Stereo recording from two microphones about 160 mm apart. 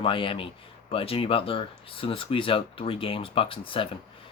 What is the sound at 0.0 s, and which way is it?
Speech, 35° left (ahead or behind).